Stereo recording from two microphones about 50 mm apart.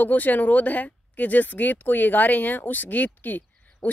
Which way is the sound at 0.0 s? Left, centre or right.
Left.